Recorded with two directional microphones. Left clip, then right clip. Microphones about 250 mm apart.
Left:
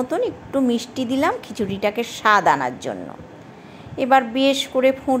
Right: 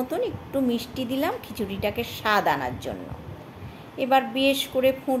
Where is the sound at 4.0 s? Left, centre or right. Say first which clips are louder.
Left 5 dB; centre.